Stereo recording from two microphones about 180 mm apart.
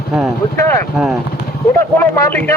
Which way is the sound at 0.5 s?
15° left (ahead or behind).